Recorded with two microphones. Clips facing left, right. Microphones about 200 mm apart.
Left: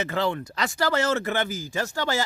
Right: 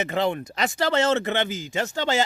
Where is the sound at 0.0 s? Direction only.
20° right (ahead or behind).